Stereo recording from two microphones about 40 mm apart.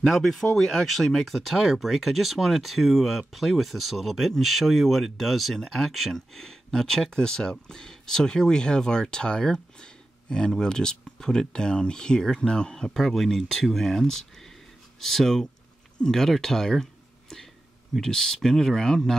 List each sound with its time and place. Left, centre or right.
0.0 s speech: centre
5.6 s speech: centre
5.9 s speech: centre
6.3 s speech: centre
12.7 s speech: centre
17.9 s speech: centre